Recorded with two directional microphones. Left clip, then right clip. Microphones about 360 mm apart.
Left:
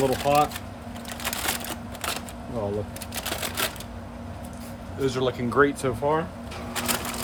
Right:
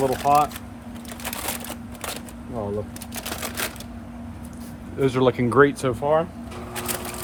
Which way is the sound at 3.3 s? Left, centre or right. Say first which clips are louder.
Left 1 dB; centre.